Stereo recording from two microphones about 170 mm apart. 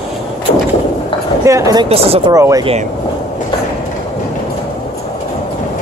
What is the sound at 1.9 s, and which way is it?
Speech, 35° right (ahead or behind).